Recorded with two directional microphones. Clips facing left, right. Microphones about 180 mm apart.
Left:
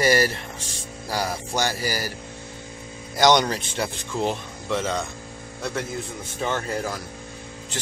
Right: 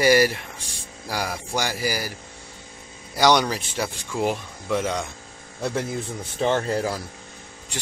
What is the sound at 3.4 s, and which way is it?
Speech, 5° right (ahead or behind).